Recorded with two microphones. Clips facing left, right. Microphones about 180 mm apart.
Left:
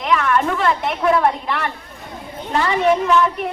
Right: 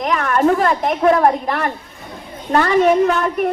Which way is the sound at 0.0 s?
40° right (ahead or behind).